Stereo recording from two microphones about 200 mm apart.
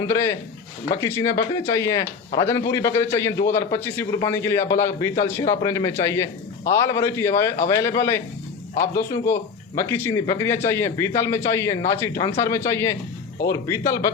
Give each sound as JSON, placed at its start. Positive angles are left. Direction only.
{"t": 0.0, "sound": "speech", "side_deg": 15}
{"t": 8.7, "sound": "a man's voice", "side_deg": 40}
{"t": 9.2, "sound": "speech", "side_deg": 15}